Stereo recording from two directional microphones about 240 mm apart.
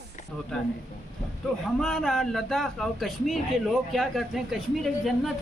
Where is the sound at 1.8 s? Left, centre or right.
Centre.